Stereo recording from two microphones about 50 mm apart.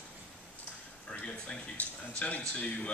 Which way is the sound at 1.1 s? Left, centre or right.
Centre.